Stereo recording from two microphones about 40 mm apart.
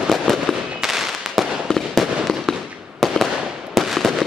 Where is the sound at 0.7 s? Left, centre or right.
Centre.